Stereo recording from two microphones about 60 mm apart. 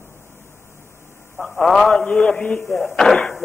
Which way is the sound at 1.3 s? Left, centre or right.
Centre.